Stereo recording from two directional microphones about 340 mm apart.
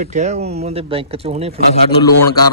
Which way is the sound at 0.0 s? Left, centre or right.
Right.